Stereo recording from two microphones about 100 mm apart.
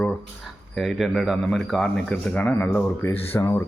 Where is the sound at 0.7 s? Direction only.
Centre (ahead or behind).